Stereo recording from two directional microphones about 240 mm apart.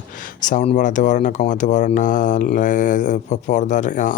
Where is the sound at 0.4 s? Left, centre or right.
Left.